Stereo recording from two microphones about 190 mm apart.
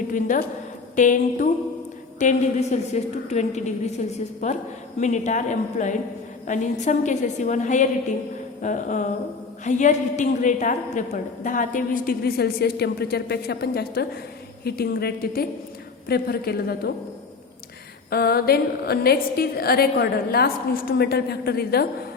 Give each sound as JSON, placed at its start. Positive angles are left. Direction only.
{"t": 0.1, "sound": "a woman's voice", "side_deg": 45}
{"t": 18.1, "sound": "a woman's voice", "side_deg": 55}